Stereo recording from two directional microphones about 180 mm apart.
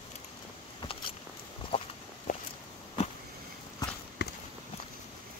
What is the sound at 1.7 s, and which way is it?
Walk, 30° left (ahead or behind).